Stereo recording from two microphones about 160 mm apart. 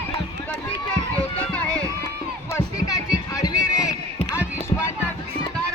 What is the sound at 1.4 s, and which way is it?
Run, 10° left (ahead or behind).